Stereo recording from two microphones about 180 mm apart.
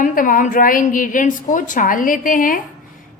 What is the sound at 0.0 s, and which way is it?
A woman's voice, 50° left (ahead or behind).